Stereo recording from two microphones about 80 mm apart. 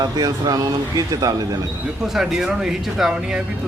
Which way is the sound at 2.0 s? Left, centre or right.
Centre.